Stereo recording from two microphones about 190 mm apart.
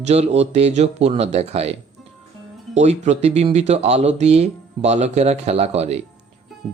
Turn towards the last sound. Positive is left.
turn(degrees=-35)  # may be behind; listen again after turning